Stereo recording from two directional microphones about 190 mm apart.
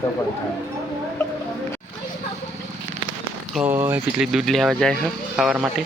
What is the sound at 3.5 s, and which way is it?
Speech, 10° right (ahead or behind).